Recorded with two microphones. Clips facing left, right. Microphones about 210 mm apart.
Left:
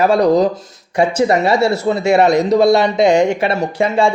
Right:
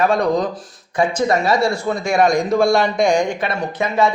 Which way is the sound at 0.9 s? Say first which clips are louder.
Left 3 dB; 70° left (ahead or behind).